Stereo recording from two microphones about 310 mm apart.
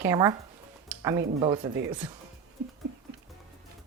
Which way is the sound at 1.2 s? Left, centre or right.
Right.